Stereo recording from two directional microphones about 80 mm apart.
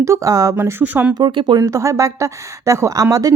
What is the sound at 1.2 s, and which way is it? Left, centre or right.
Speech, right.